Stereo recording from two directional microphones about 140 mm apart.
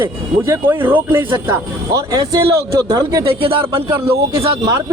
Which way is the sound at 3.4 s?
40° right (ahead or behind).